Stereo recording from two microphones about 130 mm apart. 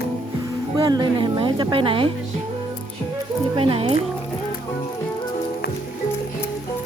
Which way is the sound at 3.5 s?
45° right (ahead or behind).